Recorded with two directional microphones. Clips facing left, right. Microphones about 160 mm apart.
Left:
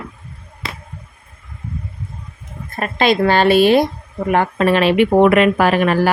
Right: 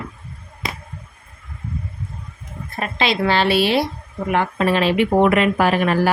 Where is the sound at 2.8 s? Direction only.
50° left (ahead or behind).